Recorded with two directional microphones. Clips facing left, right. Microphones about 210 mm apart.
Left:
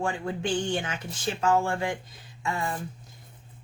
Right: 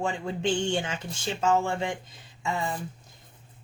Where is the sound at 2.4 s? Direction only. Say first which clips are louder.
Right 1 dB; 25° right (ahead or behind).